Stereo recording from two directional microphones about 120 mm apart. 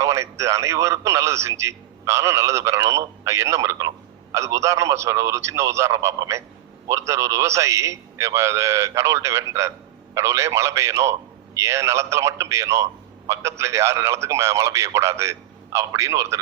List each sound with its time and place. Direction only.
0.0 s a man's voice: 25° right (ahead or behind)